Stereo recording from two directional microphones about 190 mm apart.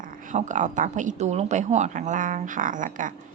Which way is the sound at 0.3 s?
40° right (ahead or behind).